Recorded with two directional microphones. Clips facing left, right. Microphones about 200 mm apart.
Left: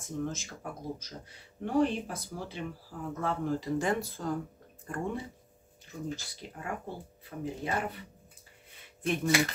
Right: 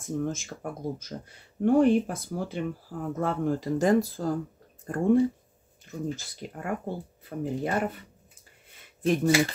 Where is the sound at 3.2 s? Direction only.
45° right (ahead or behind).